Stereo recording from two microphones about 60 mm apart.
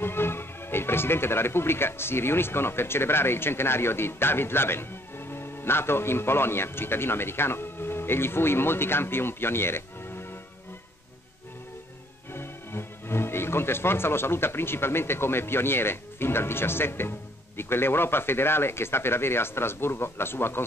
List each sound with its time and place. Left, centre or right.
0.0 s speech: left
12.3 s speech: left